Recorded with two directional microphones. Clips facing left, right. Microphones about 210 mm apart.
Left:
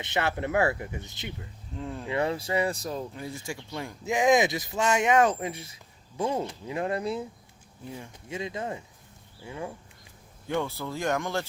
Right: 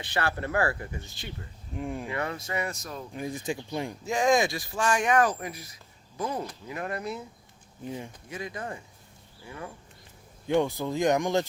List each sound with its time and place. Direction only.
0.0 s speech: 20° left (ahead or behind)
1.7 s speech: 15° right (ahead or behind)
2.0 s speech: 30° left (ahead or behind)
3.1 s speech: 15° right (ahead or behind)
4.0 s speech: 20° left (ahead or behind)
7.9 s speech: 20° right (ahead or behind)
8.3 s speech: 25° left (ahead or behind)
10.4 s speech: 15° right (ahead or behind)